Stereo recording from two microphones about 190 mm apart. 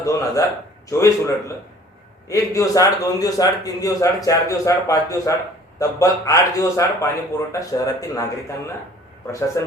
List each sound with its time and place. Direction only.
0.0 s a man's voice: 15° left (ahead or behind)